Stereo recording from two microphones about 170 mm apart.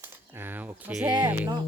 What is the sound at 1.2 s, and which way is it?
Speech, 20° right (ahead or behind).